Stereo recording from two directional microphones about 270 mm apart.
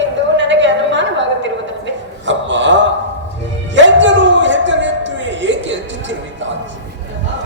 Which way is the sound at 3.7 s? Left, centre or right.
Right.